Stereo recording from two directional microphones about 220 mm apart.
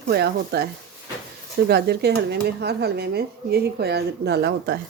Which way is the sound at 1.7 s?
45° right (ahead or behind).